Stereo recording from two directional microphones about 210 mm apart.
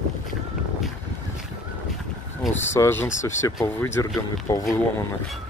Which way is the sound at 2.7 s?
10° left (ahead or behind).